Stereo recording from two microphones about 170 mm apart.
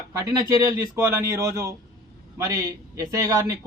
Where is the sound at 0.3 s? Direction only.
20° right (ahead or behind).